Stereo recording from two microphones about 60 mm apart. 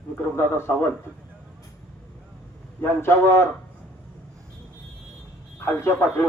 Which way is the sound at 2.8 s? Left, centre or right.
Left.